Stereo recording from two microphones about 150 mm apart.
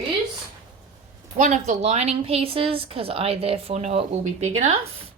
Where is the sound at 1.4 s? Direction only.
55° right (ahead or behind).